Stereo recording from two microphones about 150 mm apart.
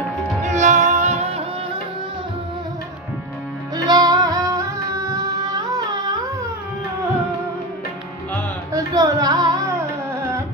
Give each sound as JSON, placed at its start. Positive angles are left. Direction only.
{"t": 0.4, "sound": "music", "side_deg": -50}
{"t": 3.7, "sound": "music", "side_deg": -25}
{"t": 8.7, "sound": "music", "side_deg": -25}